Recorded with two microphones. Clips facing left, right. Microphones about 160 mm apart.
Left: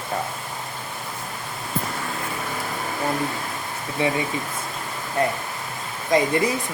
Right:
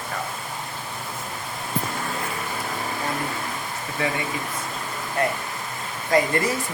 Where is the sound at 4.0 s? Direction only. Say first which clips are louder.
Left 4 dB; 20° left (ahead or behind).